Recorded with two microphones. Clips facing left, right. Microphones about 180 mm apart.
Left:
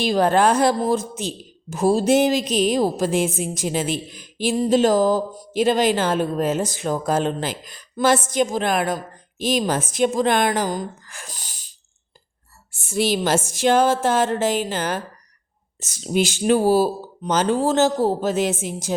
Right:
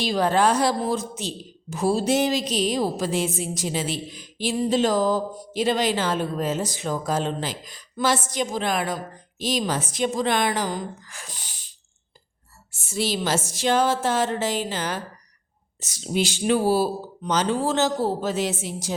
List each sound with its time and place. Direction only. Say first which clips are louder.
0.0 s a woman's voice: left 3 dB; 50° left (ahead or behind)
12.7 s a woman's voice: left 5 dB; 55° left (ahead or behind)